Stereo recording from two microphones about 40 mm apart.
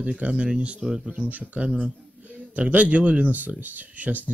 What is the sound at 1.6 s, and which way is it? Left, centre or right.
Speech, right.